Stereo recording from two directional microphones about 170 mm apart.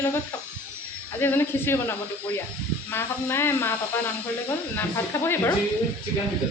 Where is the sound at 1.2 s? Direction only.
15° left (ahead or behind).